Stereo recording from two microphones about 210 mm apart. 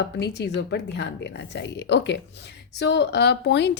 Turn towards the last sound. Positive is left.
turn(degrees=55)  # may be behind; listen again after turning